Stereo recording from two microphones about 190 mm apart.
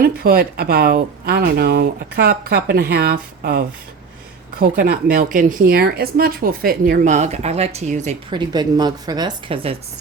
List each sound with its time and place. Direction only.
0.0 s speech: 55° right (ahead or behind)
4.8 s speech: 50° right (ahead or behind)
8.3 s a woman's voice: 25° right (ahead or behind)